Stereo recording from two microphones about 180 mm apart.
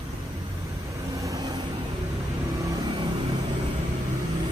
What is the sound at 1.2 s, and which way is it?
Vehicle, 20° right (ahead or behind).